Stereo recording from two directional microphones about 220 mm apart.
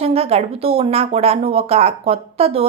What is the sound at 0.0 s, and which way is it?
Speech, 25° right (ahead or behind).